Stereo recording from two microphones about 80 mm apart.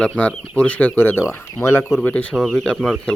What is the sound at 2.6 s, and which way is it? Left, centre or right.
Speech, centre.